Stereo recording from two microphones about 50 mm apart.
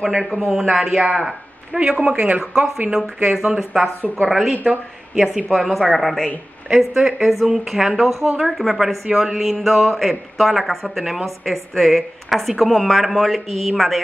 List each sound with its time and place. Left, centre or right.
0.0 s a woman's voice: centre